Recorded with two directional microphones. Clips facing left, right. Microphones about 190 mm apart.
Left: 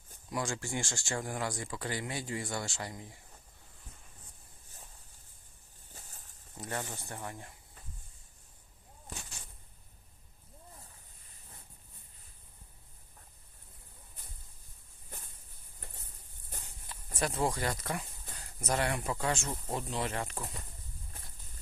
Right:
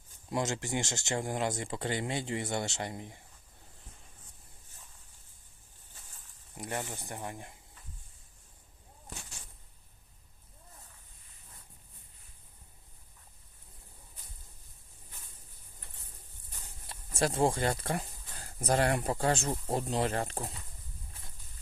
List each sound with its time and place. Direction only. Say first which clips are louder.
0.3 s speech: right 3 dB; 25° right (ahead or behind)
5.9 s a sound: left 4 dB; 40° left (ahead or behind)
6.6 s speech: right 2 dB; 15° right (ahead or behind)
17.2 s speech: right 4 dB; 30° right (ahead or behind)